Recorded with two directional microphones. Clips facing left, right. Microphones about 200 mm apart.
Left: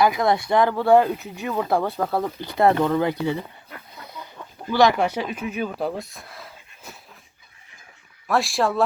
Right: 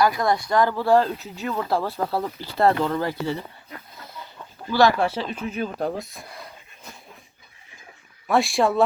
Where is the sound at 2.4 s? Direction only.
20° left (ahead or behind).